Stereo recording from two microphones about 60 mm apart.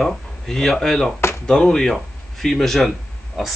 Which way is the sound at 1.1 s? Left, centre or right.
Left.